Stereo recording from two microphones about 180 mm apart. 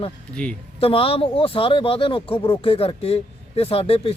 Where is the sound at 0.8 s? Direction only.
30° left (ahead or behind).